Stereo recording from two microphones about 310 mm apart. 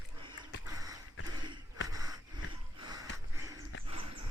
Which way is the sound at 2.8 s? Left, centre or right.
Centre.